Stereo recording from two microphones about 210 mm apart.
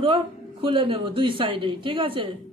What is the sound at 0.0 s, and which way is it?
A woman's voice, 25° right (ahead or behind).